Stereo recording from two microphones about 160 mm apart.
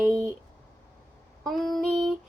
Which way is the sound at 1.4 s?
Centre (ahead or behind).